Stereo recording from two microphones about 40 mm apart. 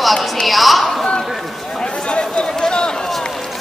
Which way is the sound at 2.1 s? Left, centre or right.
Left.